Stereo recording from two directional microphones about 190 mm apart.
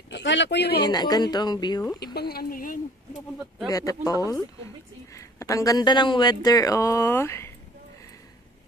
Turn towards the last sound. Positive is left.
turn(degrees=15)  # may be behind; listen again after turning